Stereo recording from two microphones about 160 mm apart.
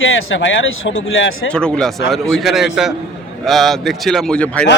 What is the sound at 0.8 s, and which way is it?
Speech, 90° left.